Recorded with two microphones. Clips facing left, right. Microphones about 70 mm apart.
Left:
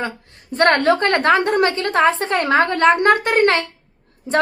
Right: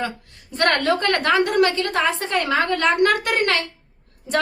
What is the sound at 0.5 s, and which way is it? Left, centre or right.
A woman's voice, left.